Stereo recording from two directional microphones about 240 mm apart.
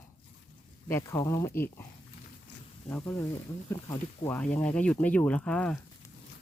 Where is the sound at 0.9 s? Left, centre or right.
Centre.